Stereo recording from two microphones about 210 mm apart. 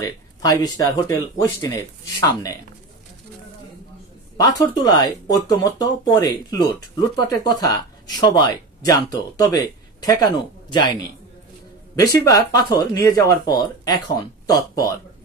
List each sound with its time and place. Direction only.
0.0 s speech: 15° left (ahead or behind)
2.1 s speech: 20° left (ahead or behind)
4.4 s speech: 15° left (ahead or behind)